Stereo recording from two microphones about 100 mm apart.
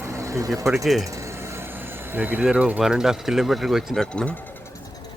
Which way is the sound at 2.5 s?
10° right (ahead or behind).